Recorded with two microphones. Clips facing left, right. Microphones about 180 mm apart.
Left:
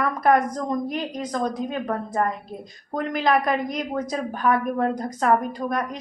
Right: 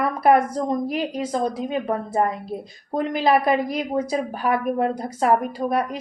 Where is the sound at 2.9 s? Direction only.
30° right (ahead or behind).